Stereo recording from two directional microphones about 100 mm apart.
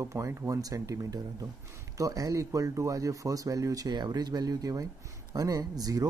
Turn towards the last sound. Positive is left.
turn(degrees=-40)  # may be behind; listen again after turning